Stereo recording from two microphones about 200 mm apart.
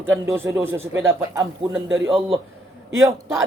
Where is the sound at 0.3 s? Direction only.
10° right (ahead or behind).